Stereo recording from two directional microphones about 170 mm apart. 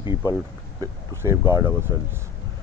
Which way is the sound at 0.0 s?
25° left (ahead or behind).